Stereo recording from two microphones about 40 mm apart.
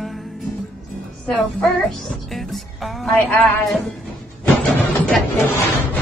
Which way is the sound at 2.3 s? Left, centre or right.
Centre.